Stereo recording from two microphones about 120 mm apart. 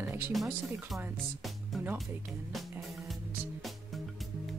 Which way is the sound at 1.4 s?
Centre (ahead or behind).